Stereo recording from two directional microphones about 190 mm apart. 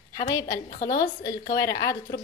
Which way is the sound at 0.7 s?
45° left (ahead or behind).